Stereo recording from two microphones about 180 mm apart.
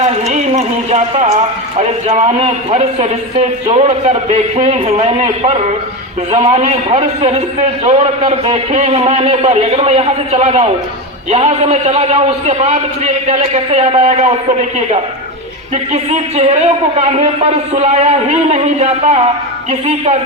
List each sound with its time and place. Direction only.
0.0 s a sound: 40° right (ahead or behind)
1.8 s a man's voice: 40° right (ahead or behind)
15.9 s a man's voice: 35° right (ahead or behind)